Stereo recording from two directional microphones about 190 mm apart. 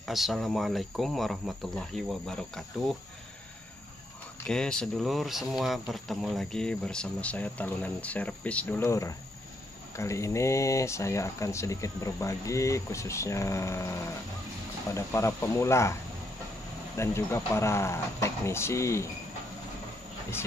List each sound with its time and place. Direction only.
0.0 s speech: centre (ahead or behind)
4.5 s speech: 5° left (ahead or behind)
15.0 s speech: 15° left (ahead or behind)